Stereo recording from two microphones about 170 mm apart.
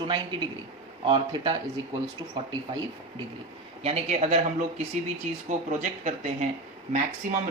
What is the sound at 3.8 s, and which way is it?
Speech, 40° right (ahead or behind).